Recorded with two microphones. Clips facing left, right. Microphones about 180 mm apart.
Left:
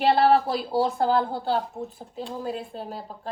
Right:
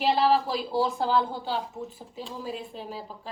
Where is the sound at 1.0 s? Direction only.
50° left (ahead or behind).